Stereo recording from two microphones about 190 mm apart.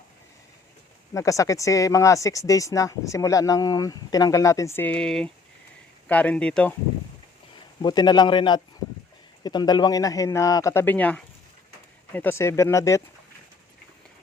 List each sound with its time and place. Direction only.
1.1 s speech: 15° left (ahead or behind)
7.8 s a man's voice: 25° left (ahead or behind)